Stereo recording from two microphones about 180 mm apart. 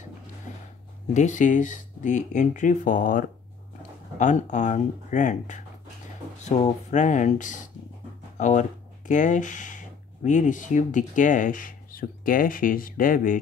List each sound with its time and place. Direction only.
1.1 s speech: 45° left (ahead or behind)